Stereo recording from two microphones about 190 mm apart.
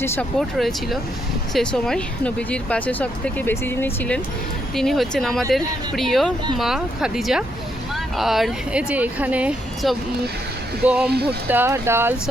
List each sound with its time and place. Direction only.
0.0 s speech: 5° left (ahead or behind)
11.1 s speech: 60° right (ahead or behind)
11.4 s speech: 10° right (ahead or behind)